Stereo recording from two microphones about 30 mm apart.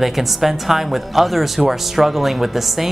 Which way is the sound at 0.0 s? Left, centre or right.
Centre.